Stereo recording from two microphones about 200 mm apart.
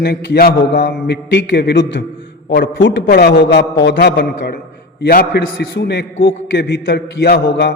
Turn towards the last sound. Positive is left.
turn(degrees=60)  # may be behind; listen again after turning